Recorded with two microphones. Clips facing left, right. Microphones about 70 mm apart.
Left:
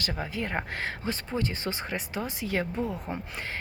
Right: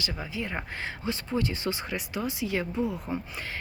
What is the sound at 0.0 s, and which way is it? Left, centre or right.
Speech, left.